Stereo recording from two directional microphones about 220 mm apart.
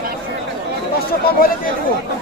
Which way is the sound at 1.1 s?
40° left (ahead or behind).